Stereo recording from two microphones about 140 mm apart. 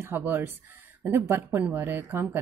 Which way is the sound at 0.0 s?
15° right (ahead or behind).